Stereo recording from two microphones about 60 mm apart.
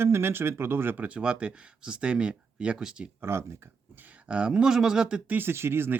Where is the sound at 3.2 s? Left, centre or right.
Right.